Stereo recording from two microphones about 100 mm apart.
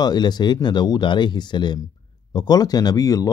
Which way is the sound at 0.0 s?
45° left (ahead or behind).